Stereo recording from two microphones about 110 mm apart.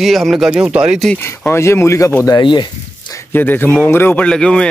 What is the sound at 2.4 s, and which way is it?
Speech, 45° left (ahead or behind).